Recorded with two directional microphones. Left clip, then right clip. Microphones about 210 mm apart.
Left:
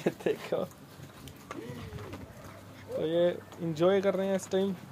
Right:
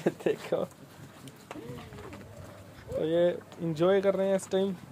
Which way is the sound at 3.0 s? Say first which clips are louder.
Right 1 dB; 15° right (ahead or behind).